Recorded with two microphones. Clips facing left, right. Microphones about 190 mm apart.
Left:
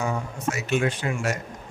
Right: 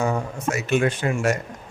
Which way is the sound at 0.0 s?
55° right (ahead or behind).